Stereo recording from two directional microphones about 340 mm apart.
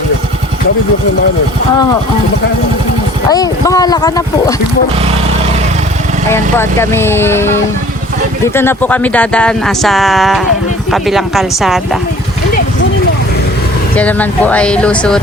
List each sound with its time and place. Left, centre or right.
3.3 s speech: centre
6.3 s speech: centre
13.9 s speech: centre